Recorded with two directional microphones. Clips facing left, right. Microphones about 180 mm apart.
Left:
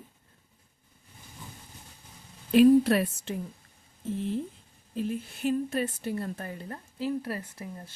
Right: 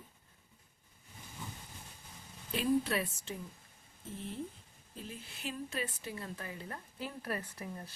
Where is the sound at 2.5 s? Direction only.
70° left (ahead or behind).